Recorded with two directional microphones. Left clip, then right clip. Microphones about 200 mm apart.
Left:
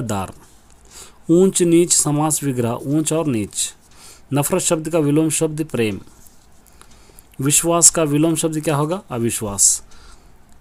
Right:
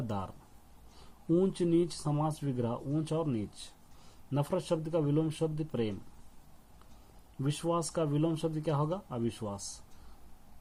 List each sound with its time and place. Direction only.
0.9 s speech: 50° left (ahead or behind)
7.4 s speech: 45° left (ahead or behind)